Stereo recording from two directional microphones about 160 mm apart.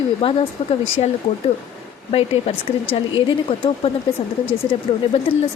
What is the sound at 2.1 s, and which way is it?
Speech, 35° left (ahead or behind).